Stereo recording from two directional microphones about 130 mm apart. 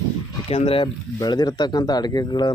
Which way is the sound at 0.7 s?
40° left (ahead or behind).